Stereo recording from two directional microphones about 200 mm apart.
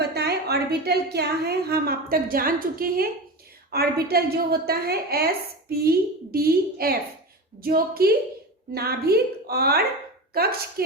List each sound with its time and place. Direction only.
0.0 s a woman's voice: 55° right (ahead or behind)